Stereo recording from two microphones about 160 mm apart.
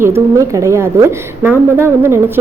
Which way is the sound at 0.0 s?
15° right (ahead or behind).